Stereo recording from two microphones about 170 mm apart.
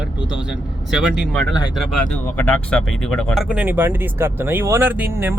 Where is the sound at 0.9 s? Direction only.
5° right (ahead or behind).